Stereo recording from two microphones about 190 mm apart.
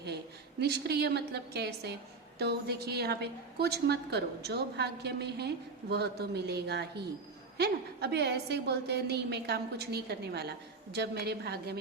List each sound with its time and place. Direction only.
0.6 s a woman's voice: 60° right (ahead or behind)